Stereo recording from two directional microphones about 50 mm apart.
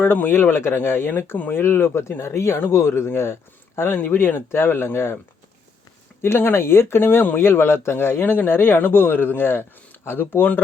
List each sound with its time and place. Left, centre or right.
0.0 s speech: left
3.9 s speech: left
6.2 s speech: left